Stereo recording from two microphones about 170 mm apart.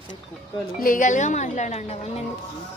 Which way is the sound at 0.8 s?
50° left (ahead or behind).